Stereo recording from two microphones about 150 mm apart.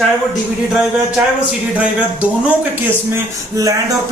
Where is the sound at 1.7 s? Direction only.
10° right (ahead or behind).